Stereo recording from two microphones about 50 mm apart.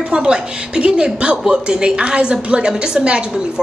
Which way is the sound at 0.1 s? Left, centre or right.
Centre.